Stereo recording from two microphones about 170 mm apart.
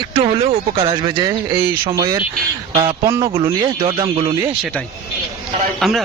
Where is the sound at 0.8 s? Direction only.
30° right (ahead or behind).